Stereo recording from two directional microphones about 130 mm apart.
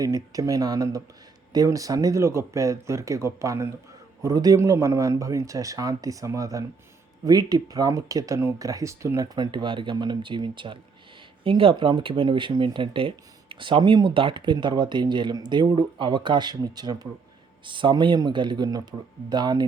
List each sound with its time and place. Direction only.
0.0 s speech: 25° right (ahead or behind)